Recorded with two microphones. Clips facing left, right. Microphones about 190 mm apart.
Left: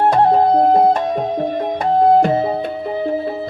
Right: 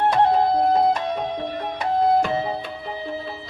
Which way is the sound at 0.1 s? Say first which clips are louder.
Left 5 dB; 45° left (ahead or behind).